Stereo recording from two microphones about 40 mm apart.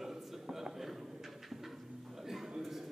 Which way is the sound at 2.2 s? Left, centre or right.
Centre.